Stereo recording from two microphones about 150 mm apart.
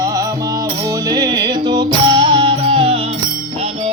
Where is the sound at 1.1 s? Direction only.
30° right (ahead or behind).